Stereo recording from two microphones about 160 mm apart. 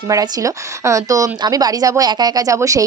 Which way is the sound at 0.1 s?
20° right (ahead or behind).